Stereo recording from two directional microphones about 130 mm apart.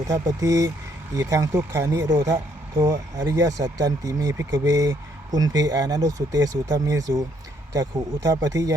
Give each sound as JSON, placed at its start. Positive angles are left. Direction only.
{"t": 0.1, "sound": "speech", "side_deg": -25}